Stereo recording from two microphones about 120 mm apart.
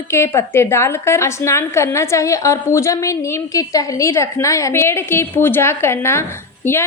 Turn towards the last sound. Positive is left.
turn(degrees=20)  # may be behind; listen again after turning